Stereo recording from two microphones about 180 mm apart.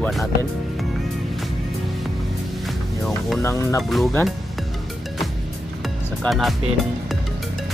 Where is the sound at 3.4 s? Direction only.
15° left (ahead or behind).